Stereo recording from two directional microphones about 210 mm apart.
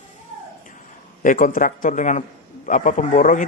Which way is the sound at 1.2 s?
40° left (ahead or behind).